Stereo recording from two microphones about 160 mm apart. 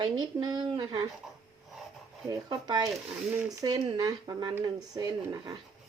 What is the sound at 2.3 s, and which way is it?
Speech, 25° right (ahead or behind).